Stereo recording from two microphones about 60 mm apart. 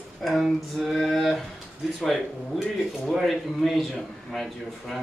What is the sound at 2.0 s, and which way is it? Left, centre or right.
A man's voice, centre.